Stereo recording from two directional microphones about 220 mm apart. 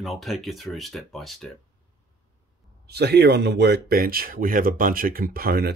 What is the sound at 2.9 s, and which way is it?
Speech, 45° right (ahead or behind).